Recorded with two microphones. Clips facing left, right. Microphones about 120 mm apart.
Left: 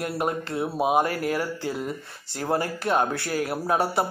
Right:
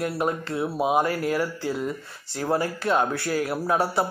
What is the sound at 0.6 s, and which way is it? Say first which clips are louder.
Speech: even; 15° left (ahead or behind).